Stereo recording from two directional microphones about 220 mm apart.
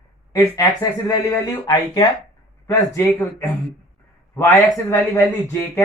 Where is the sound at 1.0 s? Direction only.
15° left (ahead or behind).